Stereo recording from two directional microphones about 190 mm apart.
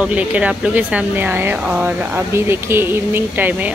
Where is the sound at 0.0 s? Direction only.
5° right (ahead or behind).